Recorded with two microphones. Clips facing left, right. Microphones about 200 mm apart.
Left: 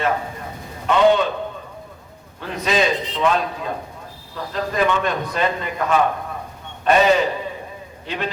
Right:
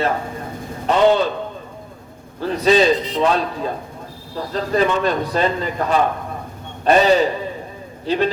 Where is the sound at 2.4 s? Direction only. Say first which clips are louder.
Right 6 dB; 35° right (ahead or behind).